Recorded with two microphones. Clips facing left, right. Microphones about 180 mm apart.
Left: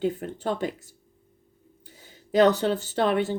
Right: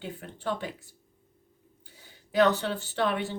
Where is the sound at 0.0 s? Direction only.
45° left (ahead or behind).